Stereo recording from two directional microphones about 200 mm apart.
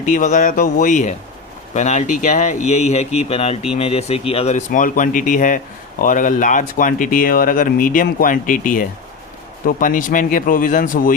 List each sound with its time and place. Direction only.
0.0 s speech: 40° left (ahead or behind)